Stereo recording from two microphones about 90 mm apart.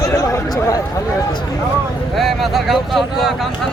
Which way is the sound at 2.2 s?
Centre (ahead or behind).